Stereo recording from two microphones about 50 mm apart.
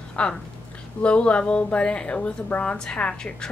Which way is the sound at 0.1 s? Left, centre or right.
Left.